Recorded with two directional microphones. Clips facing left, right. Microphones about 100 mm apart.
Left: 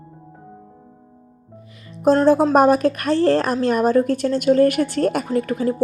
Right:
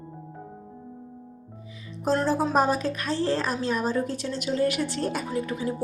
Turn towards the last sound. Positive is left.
turn(degrees=55)  # may be behind; listen again after turning